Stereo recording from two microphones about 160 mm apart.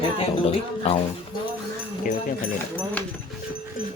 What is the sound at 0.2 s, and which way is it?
Speech, 35° left (ahead or behind).